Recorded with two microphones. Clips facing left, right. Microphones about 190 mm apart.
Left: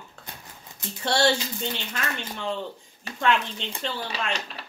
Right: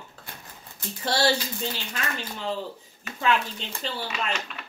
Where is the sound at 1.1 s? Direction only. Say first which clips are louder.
Left 1 dB; 5° right (ahead or behind).